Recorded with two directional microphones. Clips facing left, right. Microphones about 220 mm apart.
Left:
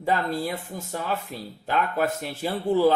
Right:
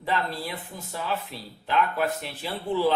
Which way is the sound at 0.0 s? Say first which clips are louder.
Left 4 dB; 45° left (ahead or behind).